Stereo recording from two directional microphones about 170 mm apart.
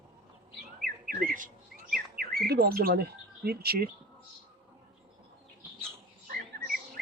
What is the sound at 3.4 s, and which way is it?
Speech, 65° right (ahead or behind).